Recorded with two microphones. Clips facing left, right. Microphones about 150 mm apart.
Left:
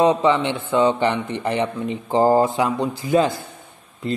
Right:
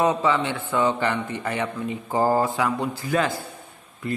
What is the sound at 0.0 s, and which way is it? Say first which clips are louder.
A man's voice: left 4 dB; 20° left (ahead or behind).